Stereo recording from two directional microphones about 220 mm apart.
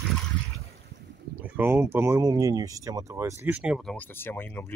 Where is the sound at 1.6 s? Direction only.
10° right (ahead or behind).